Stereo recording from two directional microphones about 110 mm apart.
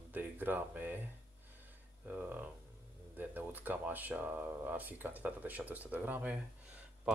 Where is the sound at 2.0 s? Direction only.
15° right (ahead or behind).